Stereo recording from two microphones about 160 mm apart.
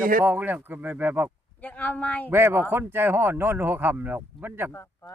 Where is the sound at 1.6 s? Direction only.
10° left (ahead or behind).